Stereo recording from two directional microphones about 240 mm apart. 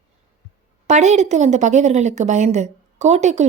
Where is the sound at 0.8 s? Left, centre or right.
Right.